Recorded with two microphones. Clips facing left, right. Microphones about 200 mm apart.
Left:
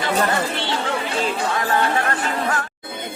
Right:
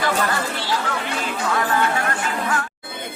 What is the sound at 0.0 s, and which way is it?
Chatter, 25° left (ahead or behind).